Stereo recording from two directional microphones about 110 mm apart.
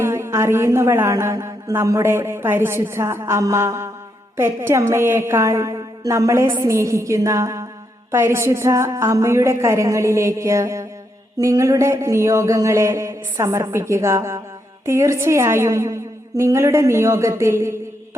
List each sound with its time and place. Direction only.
0.0 s a woman's voice: 25° right (ahead or behind)